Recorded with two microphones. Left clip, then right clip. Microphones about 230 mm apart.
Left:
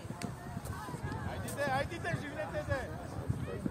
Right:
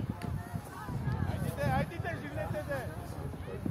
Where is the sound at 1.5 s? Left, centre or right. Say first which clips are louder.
Even; left.